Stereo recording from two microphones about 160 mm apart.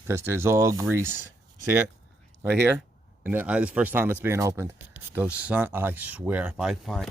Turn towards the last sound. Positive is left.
turn(degrees=0)  # may be behind; listen again after turning